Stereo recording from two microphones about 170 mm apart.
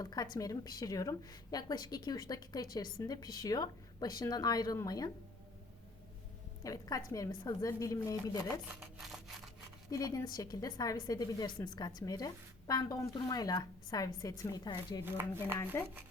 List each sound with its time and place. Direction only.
0.0 s a woman's voice: 25° left (ahead or behind)
6.6 s a woman's voice: 20° left (ahead or behind)
9.9 s a woman's voice: 20° left (ahead or behind)
15.0 s speech: 15° right (ahead or behind)
15.7 s speech: 15° left (ahead or behind)